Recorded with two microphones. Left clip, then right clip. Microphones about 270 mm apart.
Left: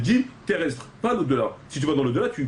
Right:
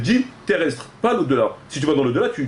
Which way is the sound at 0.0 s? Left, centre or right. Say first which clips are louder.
Right 3 dB; centre.